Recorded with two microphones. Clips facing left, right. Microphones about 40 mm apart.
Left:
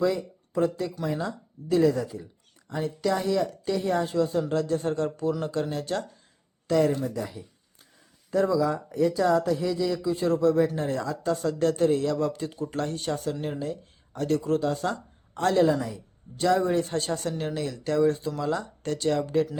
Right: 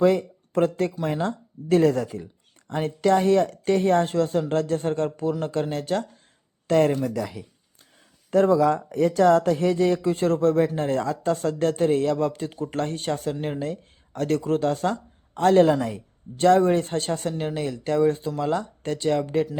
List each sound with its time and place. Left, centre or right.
0.0 s speech: right
6.7 s speech: right
7.0 s speech: right
8.3 s speech: right
15.6 s speech: right
16.4 s speech: right